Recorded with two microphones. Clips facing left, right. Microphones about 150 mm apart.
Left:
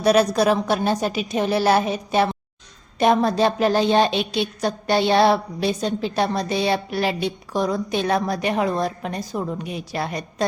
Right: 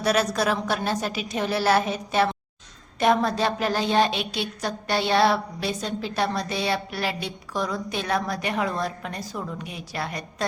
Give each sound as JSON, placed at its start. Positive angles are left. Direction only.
{"t": 0.0, "sound": "a woman's voice", "side_deg": 20}